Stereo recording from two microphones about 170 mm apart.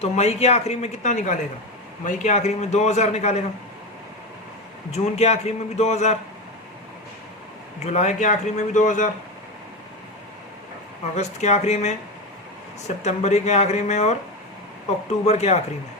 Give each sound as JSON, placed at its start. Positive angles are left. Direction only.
{"t": 0.0, "sound": "speech", "side_deg": 40}
{"t": 4.9, "sound": "speech", "side_deg": 40}
{"t": 7.9, "sound": "a man's voice", "side_deg": 45}
{"t": 11.1, "sound": "speech", "side_deg": 40}
{"t": 13.0, "sound": "speech", "side_deg": 40}
{"t": 15.3, "sound": "speech", "side_deg": 40}